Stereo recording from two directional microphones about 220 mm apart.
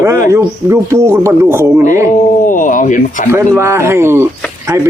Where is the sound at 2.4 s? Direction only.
35° left (ahead or behind).